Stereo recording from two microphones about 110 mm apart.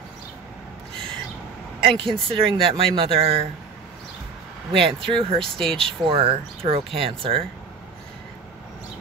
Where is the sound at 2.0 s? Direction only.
55° right (ahead or behind).